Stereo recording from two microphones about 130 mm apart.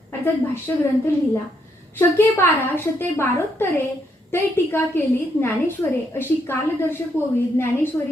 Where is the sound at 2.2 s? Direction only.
15° left (ahead or behind).